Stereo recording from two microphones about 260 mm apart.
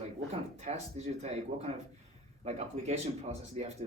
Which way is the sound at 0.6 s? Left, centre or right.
Right.